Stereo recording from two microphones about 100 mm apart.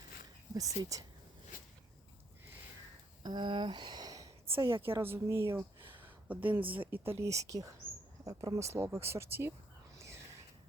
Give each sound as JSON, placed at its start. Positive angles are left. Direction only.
{"t": 0.5, "sound": "speech", "side_deg": -35}
{"t": 3.2, "sound": "speech", "side_deg": -50}
{"t": 4.5, "sound": "a woman's voice", "side_deg": -25}